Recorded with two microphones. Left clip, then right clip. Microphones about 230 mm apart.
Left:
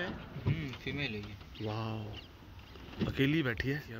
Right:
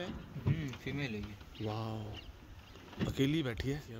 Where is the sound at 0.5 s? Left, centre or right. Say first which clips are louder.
Left 2 dB; right.